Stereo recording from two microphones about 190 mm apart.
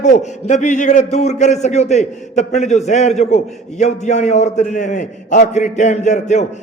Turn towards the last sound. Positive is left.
turn(degrees=40)  # may be behind; listen again after turning